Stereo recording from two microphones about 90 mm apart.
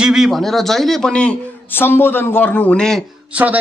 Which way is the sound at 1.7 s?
25° left (ahead or behind).